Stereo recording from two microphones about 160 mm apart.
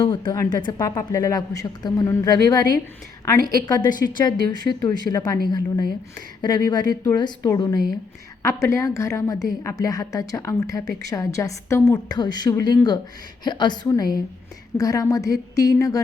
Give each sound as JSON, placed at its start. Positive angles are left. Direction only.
{"t": 0.0, "sound": "a woman's voice", "side_deg": 30}